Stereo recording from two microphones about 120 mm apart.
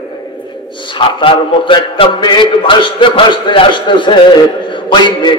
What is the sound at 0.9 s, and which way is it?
A man's voice, 45° left (ahead or behind).